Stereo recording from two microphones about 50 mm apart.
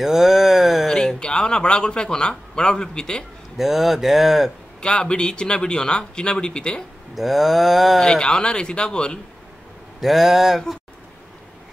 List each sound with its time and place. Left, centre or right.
0.0 s a sound: centre
0.8 s a sound: centre
1.2 s a man's voice: centre
3.5 s speech: centre
4.8 s a man's voice: centre
7.2 s speech: centre
8.0 s a man's voice: centre
9.9 s speech: centre